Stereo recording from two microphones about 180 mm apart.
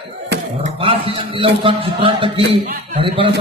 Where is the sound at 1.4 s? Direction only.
30° right (ahead or behind).